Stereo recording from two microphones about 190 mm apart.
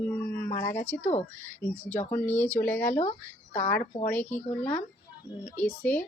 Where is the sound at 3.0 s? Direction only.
40° left (ahead or behind).